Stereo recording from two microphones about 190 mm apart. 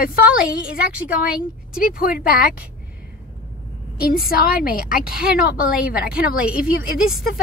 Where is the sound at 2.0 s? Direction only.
50° left (ahead or behind).